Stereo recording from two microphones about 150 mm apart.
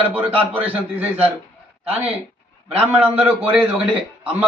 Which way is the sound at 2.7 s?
10° right (ahead or behind).